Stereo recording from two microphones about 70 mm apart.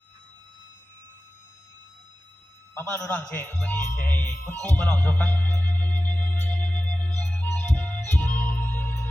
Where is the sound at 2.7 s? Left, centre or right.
Left.